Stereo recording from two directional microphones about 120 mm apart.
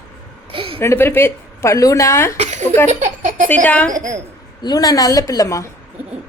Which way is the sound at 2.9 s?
90° right.